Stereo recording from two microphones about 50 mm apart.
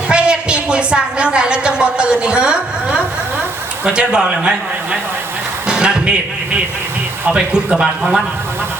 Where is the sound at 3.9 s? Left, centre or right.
Centre.